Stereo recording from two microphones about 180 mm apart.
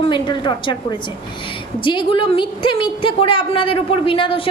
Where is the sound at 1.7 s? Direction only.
30° left (ahead or behind).